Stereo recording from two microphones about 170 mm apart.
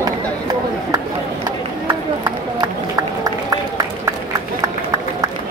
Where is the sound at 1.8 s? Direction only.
25° right (ahead or behind).